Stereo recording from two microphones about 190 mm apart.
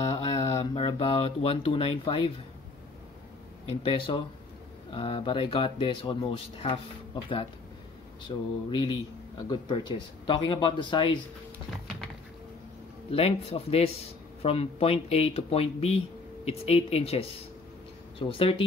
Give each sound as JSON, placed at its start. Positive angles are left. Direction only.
{"t": 0.0, "sound": "speech", "side_deg": 30}
{"t": 3.8, "sound": "speech", "side_deg": 30}
{"t": 10.2, "sound": "speech", "side_deg": 25}
{"t": 13.1, "sound": "a man's voice", "side_deg": 30}